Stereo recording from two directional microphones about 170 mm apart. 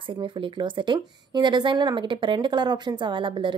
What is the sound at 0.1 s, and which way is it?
A woman's voice, 30° right (ahead or behind).